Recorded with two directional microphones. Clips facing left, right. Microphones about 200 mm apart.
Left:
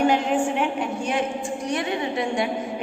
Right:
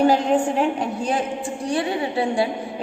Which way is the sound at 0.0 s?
35° right (ahead or behind).